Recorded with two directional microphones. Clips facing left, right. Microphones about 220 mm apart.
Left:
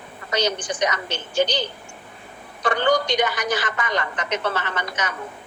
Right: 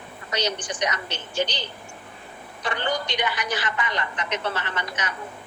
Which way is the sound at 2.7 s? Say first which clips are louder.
Left 7 dB; 45° left (ahead or behind).